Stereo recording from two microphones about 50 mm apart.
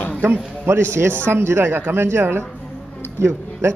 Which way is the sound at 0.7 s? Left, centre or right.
Right.